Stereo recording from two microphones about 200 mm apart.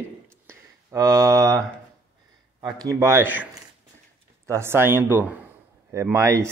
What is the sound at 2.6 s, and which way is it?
Speech, 20° right (ahead or behind).